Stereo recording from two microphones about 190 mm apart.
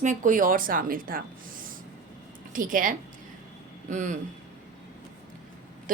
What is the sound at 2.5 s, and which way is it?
A woman's voice, 45° right (ahead or behind).